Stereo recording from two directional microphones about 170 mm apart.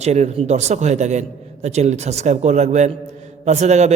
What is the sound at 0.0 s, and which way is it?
A man's voice, 40° right (ahead or behind).